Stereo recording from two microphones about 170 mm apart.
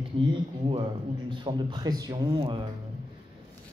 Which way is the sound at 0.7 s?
30° right (ahead or behind).